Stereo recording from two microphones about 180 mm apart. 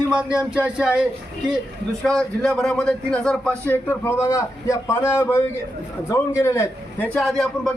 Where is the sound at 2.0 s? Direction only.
5° left (ahead or behind).